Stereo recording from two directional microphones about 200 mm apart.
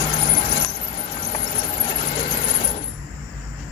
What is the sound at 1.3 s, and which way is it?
Squeal, 25° left (ahead or behind).